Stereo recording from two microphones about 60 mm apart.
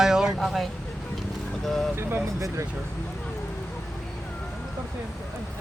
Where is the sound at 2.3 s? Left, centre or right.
Right.